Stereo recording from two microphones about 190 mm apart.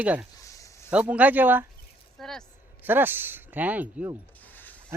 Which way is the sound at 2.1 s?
Centre (ahead or behind).